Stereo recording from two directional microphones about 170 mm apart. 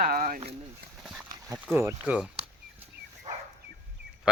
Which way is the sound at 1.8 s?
10° right (ahead or behind).